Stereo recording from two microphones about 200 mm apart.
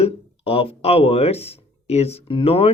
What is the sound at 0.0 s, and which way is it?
Speech, 30° left (ahead or behind).